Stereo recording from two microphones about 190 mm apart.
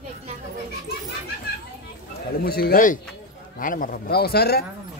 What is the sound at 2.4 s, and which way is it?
A man's voice, 50° left (ahead or behind).